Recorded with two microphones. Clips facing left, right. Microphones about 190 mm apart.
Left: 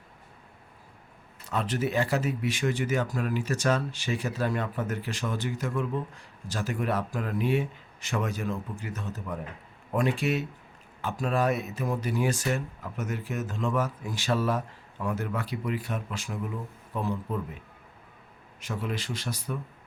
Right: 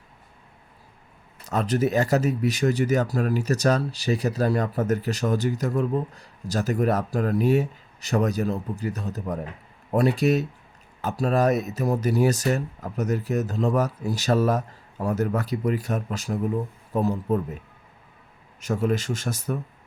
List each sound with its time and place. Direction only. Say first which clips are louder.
1.5 s speech: right 6 dB; 40° right (ahead or behind)
18.6 s speech: right 9 dB; 45° right (ahead or behind)